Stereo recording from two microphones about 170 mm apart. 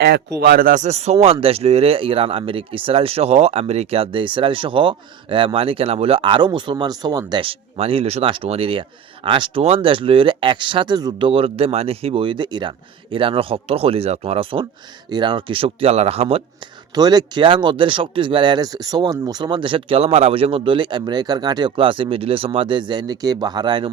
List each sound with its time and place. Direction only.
0.3 s speech: 60° right (ahead or behind); by 16.4 s 35° right (ahead or behind)
16.9 s speech: 25° right (ahead or behind)